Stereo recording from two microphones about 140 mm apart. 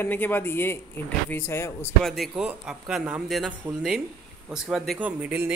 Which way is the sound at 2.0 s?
Centre (ahead or behind).